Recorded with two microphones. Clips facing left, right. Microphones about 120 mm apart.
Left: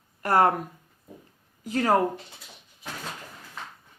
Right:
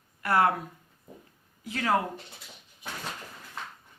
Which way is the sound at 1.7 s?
40° left (ahead or behind).